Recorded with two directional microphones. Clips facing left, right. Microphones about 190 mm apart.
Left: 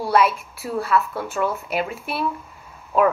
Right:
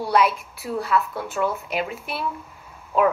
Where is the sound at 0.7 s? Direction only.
15° right (ahead or behind).